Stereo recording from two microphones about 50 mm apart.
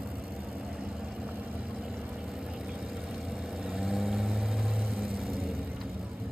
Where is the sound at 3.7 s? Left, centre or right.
Centre.